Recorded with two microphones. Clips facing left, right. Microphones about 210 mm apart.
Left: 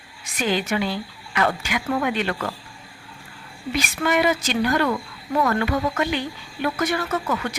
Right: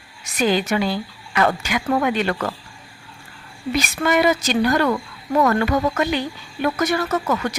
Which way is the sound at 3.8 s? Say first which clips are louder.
Right 2 dB; 40° right (ahead or behind).